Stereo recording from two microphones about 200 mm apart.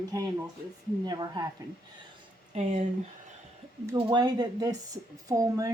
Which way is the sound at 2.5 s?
30° right (ahead or behind).